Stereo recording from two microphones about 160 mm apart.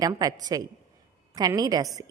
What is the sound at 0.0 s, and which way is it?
A woman's voice, 25° right (ahead or behind).